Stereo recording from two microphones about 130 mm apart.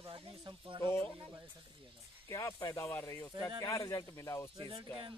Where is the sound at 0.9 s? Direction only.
20° left (ahead or behind).